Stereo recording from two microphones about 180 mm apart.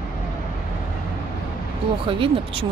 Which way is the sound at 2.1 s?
30° right (ahead or behind).